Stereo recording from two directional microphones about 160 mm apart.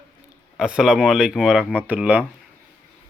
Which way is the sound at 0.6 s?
5° right (ahead or behind).